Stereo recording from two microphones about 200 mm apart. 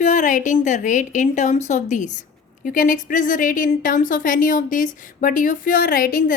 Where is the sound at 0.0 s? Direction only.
40° left (ahead or behind).